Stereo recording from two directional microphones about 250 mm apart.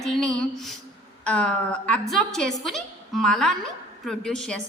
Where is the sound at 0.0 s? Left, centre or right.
Centre.